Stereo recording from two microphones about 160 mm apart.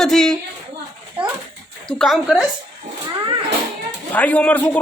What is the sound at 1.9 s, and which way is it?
Speech, centre (ahead or behind).